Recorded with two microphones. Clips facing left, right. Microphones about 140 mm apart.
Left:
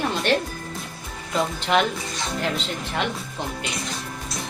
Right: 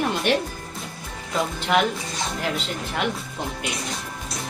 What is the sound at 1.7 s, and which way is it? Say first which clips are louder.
Speech: even; 5° right (ahead or behind).